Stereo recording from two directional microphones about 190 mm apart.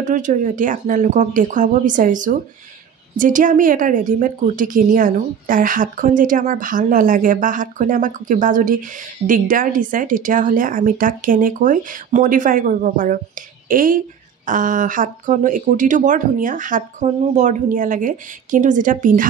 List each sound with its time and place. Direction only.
0.0 s speech: 40° right (ahead or behind)